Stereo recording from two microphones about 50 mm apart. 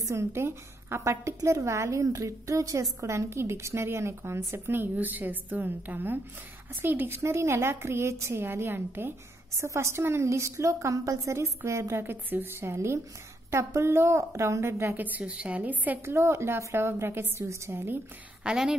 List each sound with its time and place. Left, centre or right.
0.0 s a woman's voice: right
4.9 s a woman's voice: right
7.2 s a woman's voice: right
8.4 s a woman's voice: right
9.6 s a woman's voice: right
12.0 s a woman's voice: right
15.0 s a woman's voice: right
16.1 s a woman's voice: right
18.4 s a woman's voice: centre